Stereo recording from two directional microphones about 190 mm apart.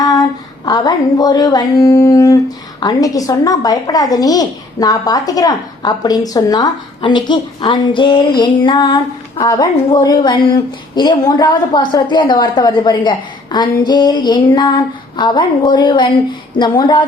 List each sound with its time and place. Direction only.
0.0 s music: 20° left (ahead or behind)
2.8 s speech: 20° left (ahead or behind)